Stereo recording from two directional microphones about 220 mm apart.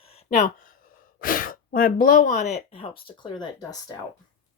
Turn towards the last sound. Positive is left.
turn(degrees=20)  # may be behind; listen again after turning